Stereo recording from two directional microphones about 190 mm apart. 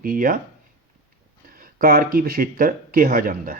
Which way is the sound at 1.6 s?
50° right (ahead or behind).